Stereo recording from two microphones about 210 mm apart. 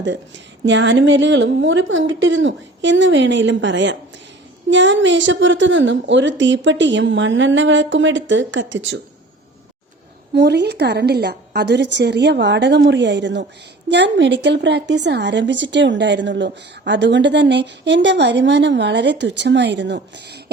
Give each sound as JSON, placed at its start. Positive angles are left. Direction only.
{"t": 0.6, "sound": "speech", "side_deg": -60}
{"t": 10.3, "sound": "a woman's voice", "side_deg": -55}